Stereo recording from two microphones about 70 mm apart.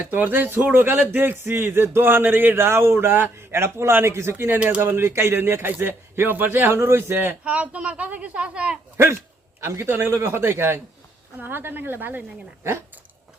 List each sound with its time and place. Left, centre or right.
0.0 s a man's voice: right
7.4 s a woman's voice: centre
9.6 s a man's voice: right